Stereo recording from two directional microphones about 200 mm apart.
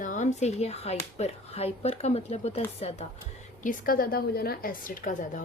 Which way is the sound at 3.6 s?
45° left (ahead or behind).